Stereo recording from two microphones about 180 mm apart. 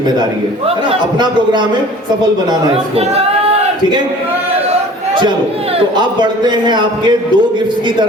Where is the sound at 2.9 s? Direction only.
35° right (ahead or behind).